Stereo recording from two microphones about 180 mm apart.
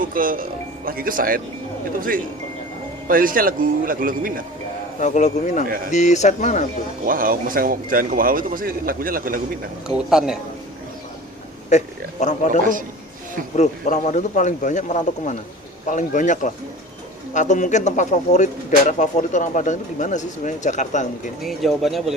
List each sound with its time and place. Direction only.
0.0 s speech: 50° right (ahead or behind)
4.9 s speech: 40° left (ahead or behind)
7.0 s speech: 50° right (ahead or behind)
9.8 s speech: 5° right (ahead or behind)
12.2 s speech: 40° left (ahead or behind)
13.6 s speech: 40° left (ahead or behind)
21.4 s speech: centre (ahead or behind)